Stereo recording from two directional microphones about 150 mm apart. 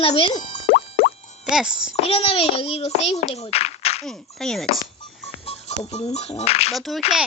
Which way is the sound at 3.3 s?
40° left (ahead or behind).